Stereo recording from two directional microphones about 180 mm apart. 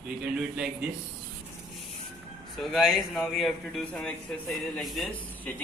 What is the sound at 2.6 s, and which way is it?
Speech, centre (ahead or behind).